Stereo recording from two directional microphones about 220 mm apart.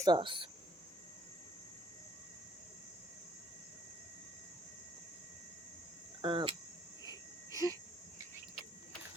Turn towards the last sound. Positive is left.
turn(degrees=15)  # may be behind; listen again after turning